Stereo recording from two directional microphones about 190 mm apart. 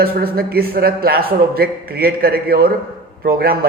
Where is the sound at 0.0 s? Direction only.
50° right (ahead or behind).